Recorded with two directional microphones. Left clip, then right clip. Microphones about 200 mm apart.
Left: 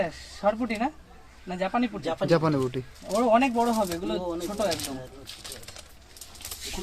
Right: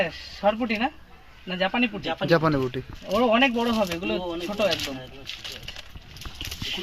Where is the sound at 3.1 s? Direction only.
20° right (ahead or behind).